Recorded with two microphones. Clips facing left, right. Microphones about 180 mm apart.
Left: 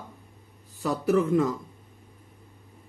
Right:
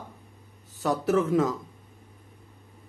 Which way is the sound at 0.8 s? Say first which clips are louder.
Even; centre (ahead or behind).